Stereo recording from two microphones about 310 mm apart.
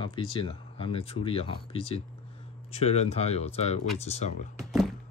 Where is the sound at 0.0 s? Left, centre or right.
Centre.